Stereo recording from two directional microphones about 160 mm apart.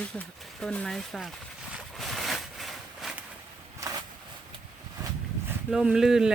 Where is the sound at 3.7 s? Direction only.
20° right (ahead or behind).